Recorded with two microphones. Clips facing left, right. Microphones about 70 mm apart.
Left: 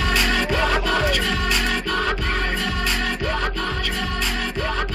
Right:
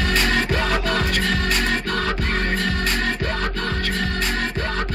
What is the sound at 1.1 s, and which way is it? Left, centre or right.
Music, right.